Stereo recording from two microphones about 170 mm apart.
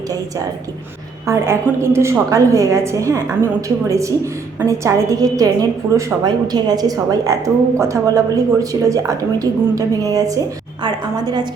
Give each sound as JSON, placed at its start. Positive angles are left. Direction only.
{"t": 1.3, "sound": "a woman's voice", "side_deg": -15}